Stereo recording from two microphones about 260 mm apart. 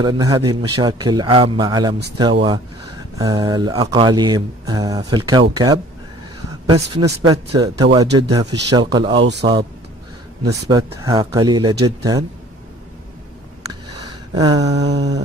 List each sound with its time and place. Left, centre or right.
0.0 s speech: centre
3.2 s speech: centre
9.2 s a man's voice: right
10.4 s speech: centre
13.7 s a sound: centre
15.0 s speech: centre